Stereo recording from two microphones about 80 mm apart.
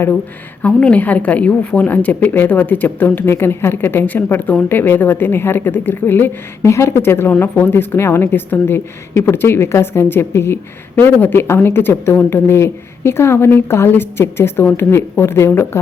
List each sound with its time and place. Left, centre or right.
0.6 s a woman's voice: centre
6.6 s a woman's voice: left